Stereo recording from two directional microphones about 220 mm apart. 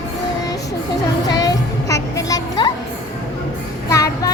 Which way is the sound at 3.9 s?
15° left (ahead or behind).